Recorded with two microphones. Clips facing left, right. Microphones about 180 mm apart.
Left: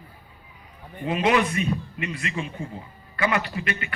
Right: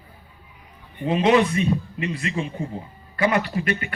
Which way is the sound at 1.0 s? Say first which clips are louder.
Right 4 dB; 30° right (ahead or behind).